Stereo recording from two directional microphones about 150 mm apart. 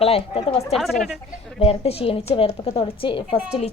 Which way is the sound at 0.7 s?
Centre (ahead or behind).